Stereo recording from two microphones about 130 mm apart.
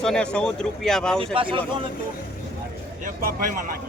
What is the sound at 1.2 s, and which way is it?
Speech, 45° right (ahead or behind).